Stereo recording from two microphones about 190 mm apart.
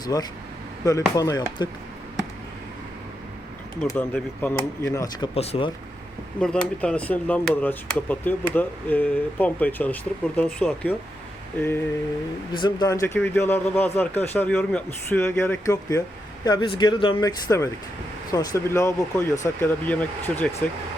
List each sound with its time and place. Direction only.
0.0 s speech: 20° left (ahead or behind)
3.9 s speech: 10° left (ahead or behind)
5.3 s speech: 30° left (ahead or behind)
6.4 s speech: 5° left (ahead or behind)
12.5 s speech: 20° left (ahead or behind)